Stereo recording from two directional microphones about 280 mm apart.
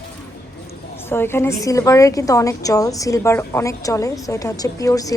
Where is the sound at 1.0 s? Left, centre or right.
Centre.